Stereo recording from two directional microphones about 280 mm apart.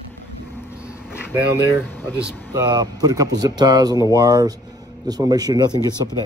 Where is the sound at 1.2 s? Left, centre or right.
Centre.